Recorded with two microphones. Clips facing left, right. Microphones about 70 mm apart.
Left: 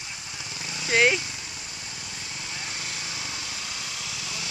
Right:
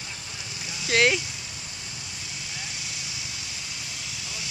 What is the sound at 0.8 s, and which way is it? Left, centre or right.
Speech, centre.